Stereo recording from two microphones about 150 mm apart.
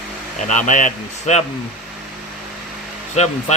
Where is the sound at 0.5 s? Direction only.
55° left (ahead or behind).